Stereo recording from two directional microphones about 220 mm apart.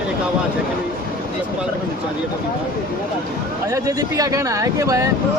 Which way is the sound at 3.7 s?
15° right (ahead or behind).